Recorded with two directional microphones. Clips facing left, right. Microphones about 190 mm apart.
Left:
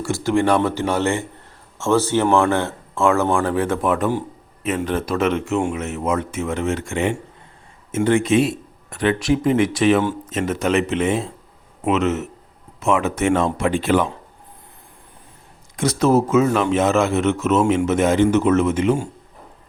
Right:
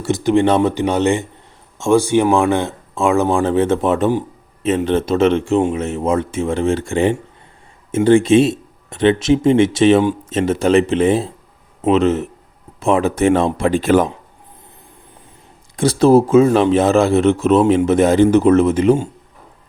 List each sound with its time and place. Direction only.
0.0 s speech: 20° right (ahead or behind); by 14.1 s 40° right (ahead or behind)
15.7 s speech: 30° right (ahead or behind)